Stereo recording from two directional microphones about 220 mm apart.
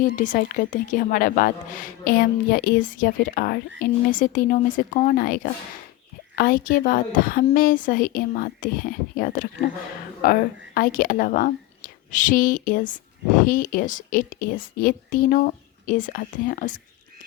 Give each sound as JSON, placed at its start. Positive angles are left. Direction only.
{"t": 0.0, "sound": "a woman's voice", "side_deg": 35}